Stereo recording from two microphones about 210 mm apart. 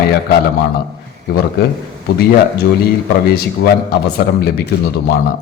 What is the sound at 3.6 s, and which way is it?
Speech, 45° left (ahead or behind).